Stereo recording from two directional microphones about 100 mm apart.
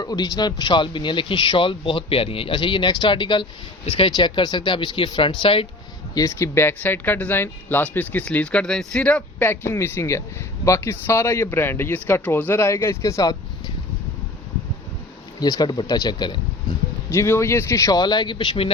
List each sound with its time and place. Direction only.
0.0 s speech: 40° left (ahead or behind)
3.8 s speech: 70° left (ahead or behind)
4.1 s speech: 50° left (ahead or behind)
6.1 s speech: 30° left (ahead or behind)
15.4 s speech: 45° left (ahead or behind)
17.1 s speech: 25° left (ahead or behind); by 18.7 s 60° left (ahead or behind)